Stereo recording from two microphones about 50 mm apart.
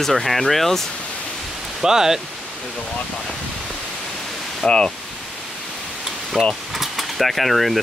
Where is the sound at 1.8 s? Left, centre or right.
Centre.